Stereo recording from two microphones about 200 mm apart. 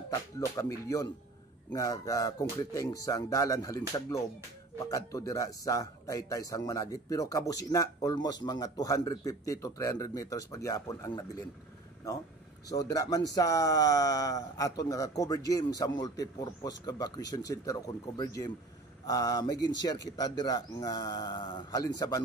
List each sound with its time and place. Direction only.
0.6 s speech: 15° left (ahead or behind)
4.8 s speech: 15° left (ahead or behind)
12.6 s speech: 20° left (ahead or behind)